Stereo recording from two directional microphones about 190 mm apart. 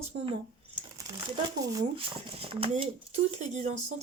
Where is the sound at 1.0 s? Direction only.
20° right (ahead or behind).